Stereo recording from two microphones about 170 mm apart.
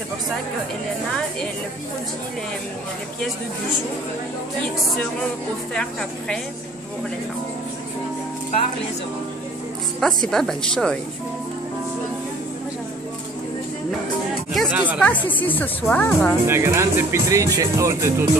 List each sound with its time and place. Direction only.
5.8 s speech: 5° left (ahead or behind)
9.9 s speech: 5° left (ahead or behind)
14.7 s snake: 10° right (ahead or behind)
15.0 s speech: 10° left (ahead or behind)
16.4 s speech: 15° right (ahead or behind)